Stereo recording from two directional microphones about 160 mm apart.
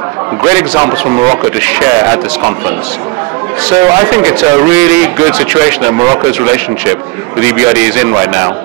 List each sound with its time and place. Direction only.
0.4 s speech: 20° right (ahead or behind)
3.8 s speech: 15° right (ahead or behind)